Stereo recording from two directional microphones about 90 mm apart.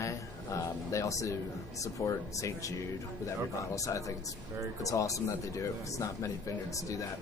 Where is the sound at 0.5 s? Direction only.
35° left (ahead or behind).